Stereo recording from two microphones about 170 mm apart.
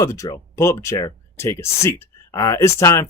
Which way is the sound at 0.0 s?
20° left (ahead or behind).